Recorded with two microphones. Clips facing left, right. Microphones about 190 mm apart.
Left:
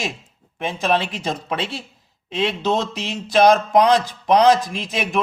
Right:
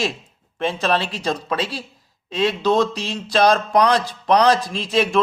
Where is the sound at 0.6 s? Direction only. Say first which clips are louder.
Even; 15° left (ahead or behind).